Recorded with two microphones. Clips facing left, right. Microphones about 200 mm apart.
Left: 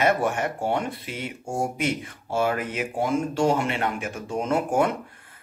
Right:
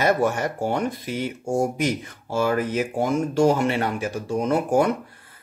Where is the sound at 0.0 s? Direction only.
40° right (ahead or behind).